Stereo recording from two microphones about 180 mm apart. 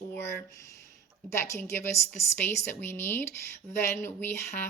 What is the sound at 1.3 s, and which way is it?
Speech, 15° left (ahead or behind).